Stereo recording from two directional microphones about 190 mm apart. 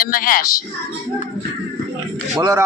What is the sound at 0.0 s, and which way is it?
Speech, 50° left (ahead or behind).